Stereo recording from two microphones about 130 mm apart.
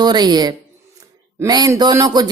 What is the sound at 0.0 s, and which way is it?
Speech, 30° right (ahead or behind).